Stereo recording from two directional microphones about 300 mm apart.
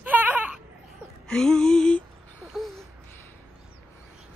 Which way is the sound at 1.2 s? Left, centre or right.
Centre.